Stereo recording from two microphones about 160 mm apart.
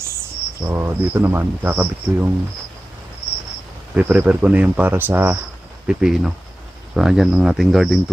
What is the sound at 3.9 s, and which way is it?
Speech, 10° right (ahead or behind).